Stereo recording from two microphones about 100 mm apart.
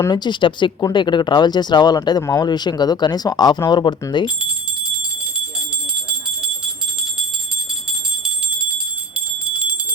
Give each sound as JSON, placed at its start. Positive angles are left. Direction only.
{"t": 0.1, "sound": "speech", "side_deg": 50}
{"t": 9.1, "sound": "bell", "side_deg": -10}